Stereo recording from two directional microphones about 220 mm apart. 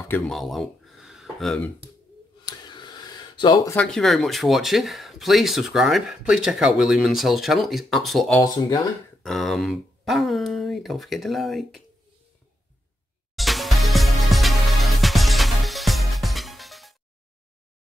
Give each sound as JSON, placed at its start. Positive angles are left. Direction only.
{"t": 0.1, "sound": "speech", "side_deg": 0}
{"t": 2.4, "sound": "a sound", "side_deg": 20}
{"t": 3.7, "sound": "speech", "side_deg": 5}
{"t": 8.4, "sound": "speech", "side_deg": 15}
{"t": 9.2, "sound": "speech", "side_deg": 0}
{"t": 13.4, "sound": "music", "side_deg": 0}